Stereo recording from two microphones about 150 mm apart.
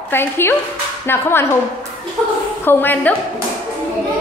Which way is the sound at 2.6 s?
15° left (ahead or behind).